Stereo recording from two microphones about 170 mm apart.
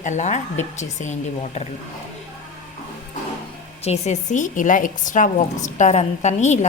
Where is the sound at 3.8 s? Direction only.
40° left (ahead or behind).